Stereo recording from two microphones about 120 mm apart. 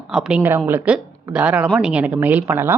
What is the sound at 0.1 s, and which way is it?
Speech, 5° right (ahead or behind).